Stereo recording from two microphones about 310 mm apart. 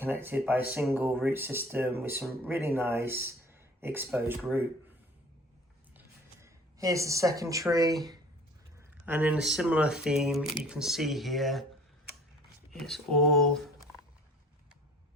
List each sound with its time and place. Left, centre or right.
0.0 s speech: centre
6.4 s speech: centre
9.0 s speech: centre
12.7 s speech: centre